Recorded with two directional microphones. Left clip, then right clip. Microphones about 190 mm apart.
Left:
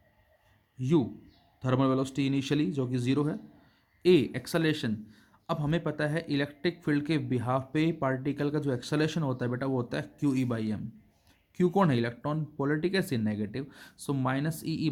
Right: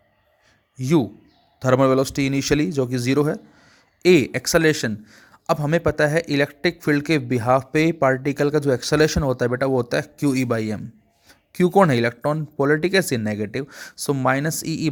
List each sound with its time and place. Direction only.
0.8 s a man's voice: 35° right (ahead or behind)